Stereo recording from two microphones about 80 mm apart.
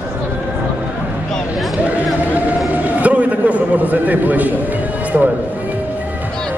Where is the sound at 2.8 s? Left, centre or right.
Centre.